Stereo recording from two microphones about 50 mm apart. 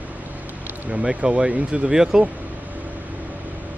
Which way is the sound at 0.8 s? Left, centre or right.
Right.